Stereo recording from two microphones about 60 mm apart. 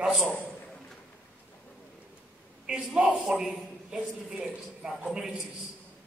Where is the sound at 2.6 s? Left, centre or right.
Centre.